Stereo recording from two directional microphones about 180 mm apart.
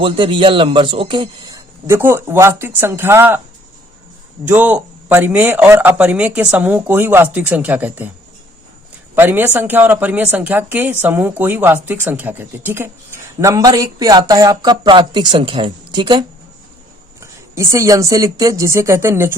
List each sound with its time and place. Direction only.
0.0 s a woman's voice: 25° right (ahead or behind)
4.4 s a woman's voice: 10° right (ahead or behind)
9.1 s a woman's voice: 10° right (ahead or behind)